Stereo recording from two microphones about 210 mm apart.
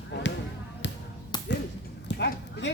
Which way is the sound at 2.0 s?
50° left (ahead or behind).